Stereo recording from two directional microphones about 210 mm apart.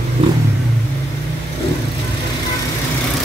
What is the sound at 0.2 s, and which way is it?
Vehicle, 25° right (ahead or behind).